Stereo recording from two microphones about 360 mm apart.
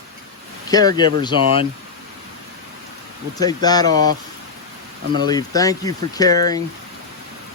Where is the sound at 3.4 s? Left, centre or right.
Centre.